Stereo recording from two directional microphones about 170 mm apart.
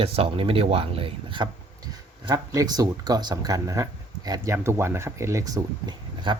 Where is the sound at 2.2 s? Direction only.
20° right (ahead or behind).